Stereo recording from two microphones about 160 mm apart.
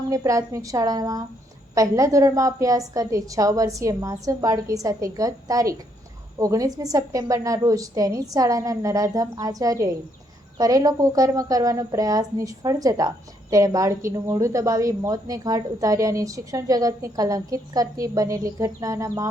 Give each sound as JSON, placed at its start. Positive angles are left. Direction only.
{"t": 0.1, "sound": "a woman's voice", "side_deg": -20}